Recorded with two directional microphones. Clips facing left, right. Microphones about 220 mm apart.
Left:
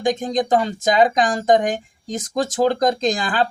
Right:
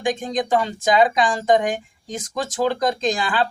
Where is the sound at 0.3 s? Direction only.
40° left (ahead or behind).